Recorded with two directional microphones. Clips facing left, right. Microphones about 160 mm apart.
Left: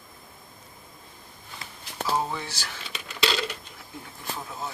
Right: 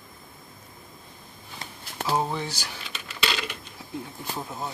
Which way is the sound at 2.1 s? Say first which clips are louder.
Right 3 dB; 15° right (ahead or behind).